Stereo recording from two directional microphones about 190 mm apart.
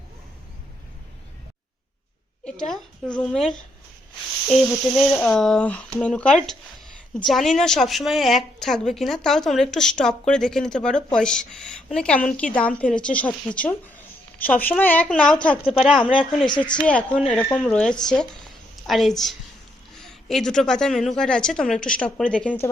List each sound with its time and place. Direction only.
2.4 s a woman's voice: 5° left (ahead or behind)
16.8 s a woman's voice: 5° left (ahead or behind)